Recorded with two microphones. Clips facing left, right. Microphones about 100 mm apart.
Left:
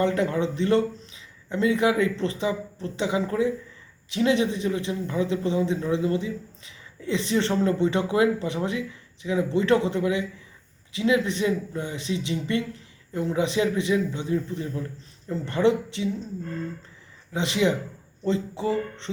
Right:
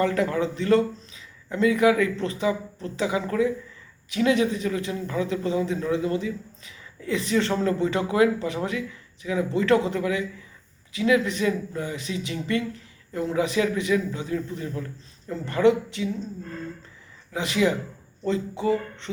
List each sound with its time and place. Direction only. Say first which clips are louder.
0.0 s speech: even; 25° left (ahead or behind)
17.3 s speech: even; 25° left (ahead or behind)